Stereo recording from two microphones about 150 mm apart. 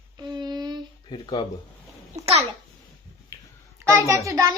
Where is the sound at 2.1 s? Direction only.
45° right (ahead or behind).